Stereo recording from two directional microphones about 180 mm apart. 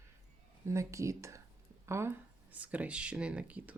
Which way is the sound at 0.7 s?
15° right (ahead or behind).